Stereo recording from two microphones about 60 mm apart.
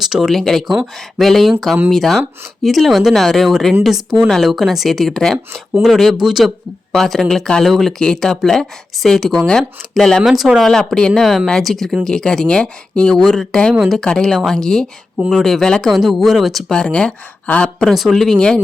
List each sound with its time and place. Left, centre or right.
0.0 s speech: centre
6.9 s speech: centre
10.2 s speech: centre
10.7 s speech: centre
14.0 s speech: centre
16.7 s speech: centre
17.8 s speech: centre